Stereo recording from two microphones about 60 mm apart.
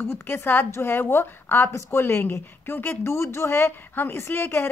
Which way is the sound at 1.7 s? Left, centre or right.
Left.